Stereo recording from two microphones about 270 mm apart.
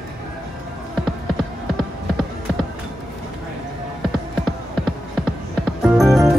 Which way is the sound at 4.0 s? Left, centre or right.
Centre.